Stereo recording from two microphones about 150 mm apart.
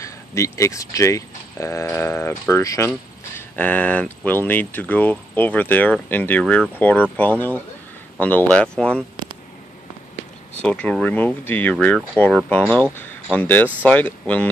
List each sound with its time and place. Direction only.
0.0 s speech: 20° left (ahead or behind)
10.6 s speech: 5° left (ahead or behind)